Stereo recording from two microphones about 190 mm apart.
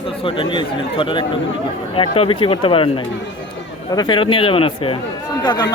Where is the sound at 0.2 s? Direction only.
25° left (ahead or behind).